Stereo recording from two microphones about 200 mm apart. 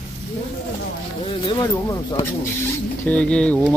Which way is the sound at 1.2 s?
25° left (ahead or behind).